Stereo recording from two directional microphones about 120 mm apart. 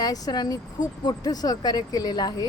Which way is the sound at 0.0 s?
35° left (ahead or behind).